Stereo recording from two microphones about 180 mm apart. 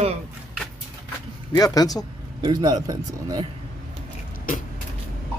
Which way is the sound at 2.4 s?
25° right (ahead or behind).